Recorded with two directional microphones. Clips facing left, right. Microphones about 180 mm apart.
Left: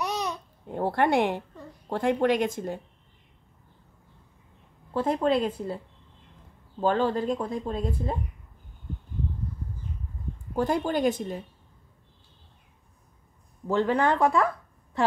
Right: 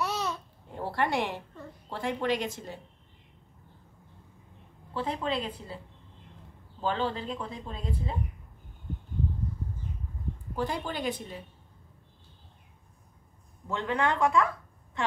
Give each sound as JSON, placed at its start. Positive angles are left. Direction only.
{"t": 0.0, "sound": "babbling", "side_deg": 15}
{"t": 0.7, "sound": "speech", "side_deg": 55}
{"t": 4.9, "sound": "speech", "side_deg": 45}
{"t": 6.8, "sound": "speech", "side_deg": 45}
{"t": 10.5, "sound": "speech", "side_deg": 45}
{"t": 13.7, "sound": "speech", "side_deg": 35}